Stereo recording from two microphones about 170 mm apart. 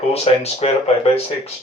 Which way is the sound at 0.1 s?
35° left (ahead or behind).